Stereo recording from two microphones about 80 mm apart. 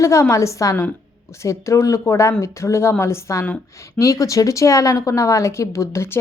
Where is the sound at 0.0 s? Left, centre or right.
Left.